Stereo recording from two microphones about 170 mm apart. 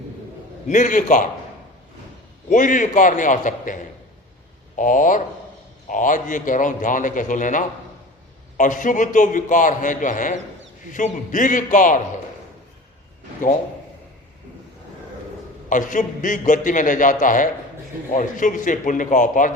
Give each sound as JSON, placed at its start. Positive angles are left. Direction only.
{"t": 0.7, "sound": "a man's voice", "side_deg": 50}
{"t": 2.5, "sound": "a man's voice", "side_deg": 50}
{"t": 4.8, "sound": "a man's voice", "side_deg": 50}
{"t": 15.7, "sound": "a man's voice", "side_deg": 50}